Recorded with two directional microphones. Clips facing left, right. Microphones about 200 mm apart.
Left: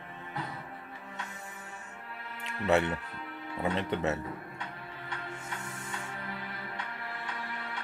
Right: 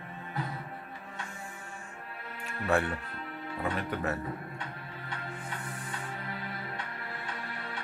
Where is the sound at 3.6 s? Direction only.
25° left (ahead or behind).